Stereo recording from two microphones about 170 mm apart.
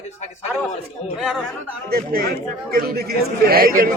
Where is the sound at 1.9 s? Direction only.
65° right (ahead or behind).